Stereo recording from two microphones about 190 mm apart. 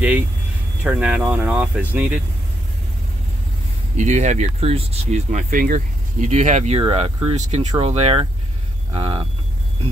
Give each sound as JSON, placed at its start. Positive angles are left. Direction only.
{"t": 0.8, "sound": "speech", "side_deg": -5}
{"t": 3.9, "sound": "speech", "side_deg": -40}